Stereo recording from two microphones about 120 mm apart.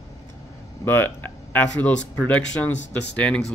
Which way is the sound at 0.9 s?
15° left (ahead or behind).